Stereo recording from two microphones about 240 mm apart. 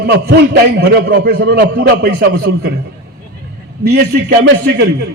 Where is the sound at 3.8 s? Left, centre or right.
Right.